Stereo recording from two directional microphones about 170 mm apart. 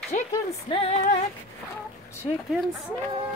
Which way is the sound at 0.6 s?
35° left (ahead or behind).